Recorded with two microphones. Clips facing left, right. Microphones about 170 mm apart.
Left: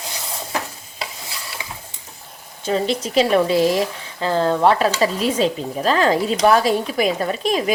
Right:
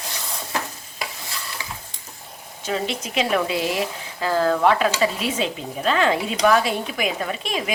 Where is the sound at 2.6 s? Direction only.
35° left (ahead or behind).